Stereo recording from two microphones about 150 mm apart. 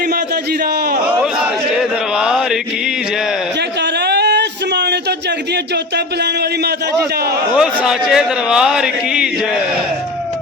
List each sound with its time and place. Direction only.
2.1 s mantra: 5° right (ahead or behind)
4.0 s a sound: 90° right
7.5 s a man's voice: 5° right (ahead or behind)